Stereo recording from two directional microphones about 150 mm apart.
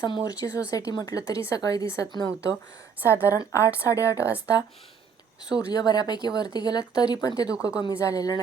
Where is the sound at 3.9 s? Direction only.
20° left (ahead or behind).